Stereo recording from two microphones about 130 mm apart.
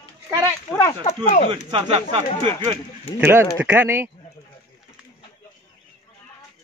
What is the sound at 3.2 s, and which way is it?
Speech, 20° right (ahead or behind).